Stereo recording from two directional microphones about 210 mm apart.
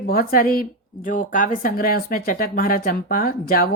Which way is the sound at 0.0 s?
45° left (ahead or behind).